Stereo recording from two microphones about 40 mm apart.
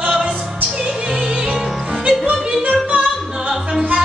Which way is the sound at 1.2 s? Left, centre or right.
Right.